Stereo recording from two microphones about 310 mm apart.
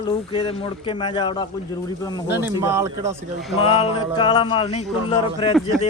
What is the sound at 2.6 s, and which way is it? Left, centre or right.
Speech, centre.